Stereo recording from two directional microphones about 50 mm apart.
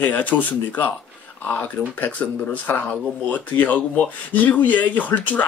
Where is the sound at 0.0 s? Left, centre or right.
Left.